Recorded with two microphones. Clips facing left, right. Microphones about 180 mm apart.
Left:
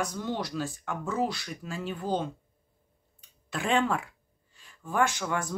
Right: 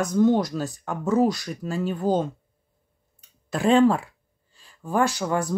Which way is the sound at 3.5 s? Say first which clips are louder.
Right 9 dB; 35° right (ahead or behind).